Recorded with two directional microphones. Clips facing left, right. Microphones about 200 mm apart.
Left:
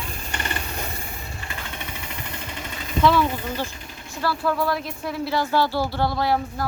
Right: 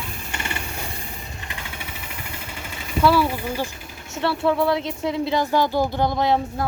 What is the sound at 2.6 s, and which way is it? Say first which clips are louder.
Speech: right 1 dB; 10° right (ahead or behind).